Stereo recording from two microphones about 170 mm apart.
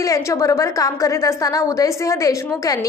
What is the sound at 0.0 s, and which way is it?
A woman's voice, 20° left (ahead or behind).